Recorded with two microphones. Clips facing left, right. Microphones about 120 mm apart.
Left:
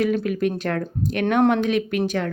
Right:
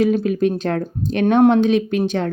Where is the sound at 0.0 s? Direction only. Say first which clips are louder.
Right 4 dB; 25° right (ahead or behind).